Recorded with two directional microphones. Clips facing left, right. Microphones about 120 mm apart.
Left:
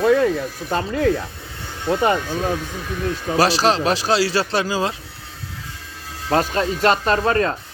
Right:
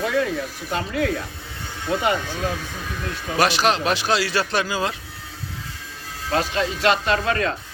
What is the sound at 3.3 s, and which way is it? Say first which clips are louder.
Speech: left 2 dB; 30° left (ahead or behind).